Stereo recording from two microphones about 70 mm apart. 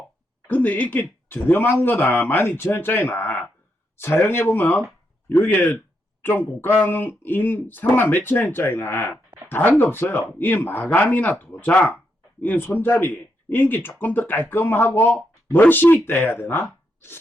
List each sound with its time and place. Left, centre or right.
0.4 s speech: left